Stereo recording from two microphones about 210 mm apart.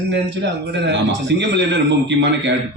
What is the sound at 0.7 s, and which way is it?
Speech, 55° right (ahead or behind).